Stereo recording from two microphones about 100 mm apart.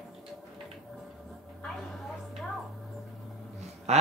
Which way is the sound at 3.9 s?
90° right.